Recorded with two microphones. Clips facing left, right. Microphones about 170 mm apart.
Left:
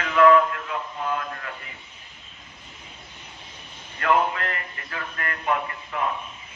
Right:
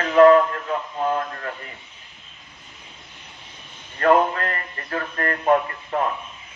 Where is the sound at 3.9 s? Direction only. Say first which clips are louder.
Right 5 dB; 40° right (ahead or behind).